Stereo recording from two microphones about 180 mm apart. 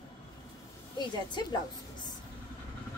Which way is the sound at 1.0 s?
25° left (ahead or behind).